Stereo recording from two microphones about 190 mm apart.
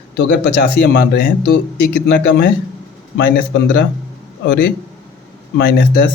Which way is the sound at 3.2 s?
55° left (ahead or behind).